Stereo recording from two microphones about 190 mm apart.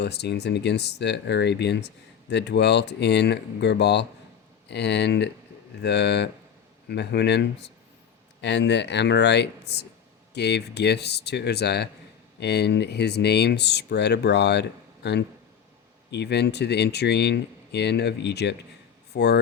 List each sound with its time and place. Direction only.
0.0 s speech: 65° left (ahead or behind)